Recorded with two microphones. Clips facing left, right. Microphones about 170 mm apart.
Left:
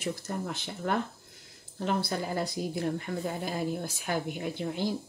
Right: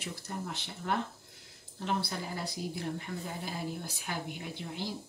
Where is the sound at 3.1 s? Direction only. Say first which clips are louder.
Left 6 dB; 65° left (ahead or behind).